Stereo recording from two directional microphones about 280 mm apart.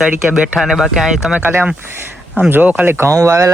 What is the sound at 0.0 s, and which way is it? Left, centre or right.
Speech, centre.